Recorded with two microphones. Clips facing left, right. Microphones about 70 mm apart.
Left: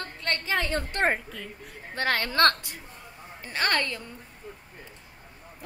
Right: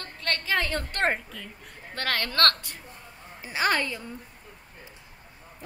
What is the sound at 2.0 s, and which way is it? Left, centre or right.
Speech, left.